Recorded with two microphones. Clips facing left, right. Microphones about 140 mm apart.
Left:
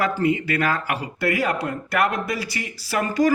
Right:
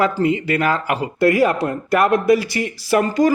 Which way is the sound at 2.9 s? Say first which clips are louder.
Right 4 dB; 40° right (ahead or behind).